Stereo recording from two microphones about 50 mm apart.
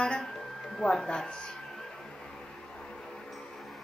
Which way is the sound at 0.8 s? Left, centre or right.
Centre.